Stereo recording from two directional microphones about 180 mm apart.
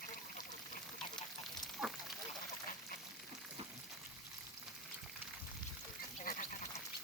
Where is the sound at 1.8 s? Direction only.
Centre (ahead or behind).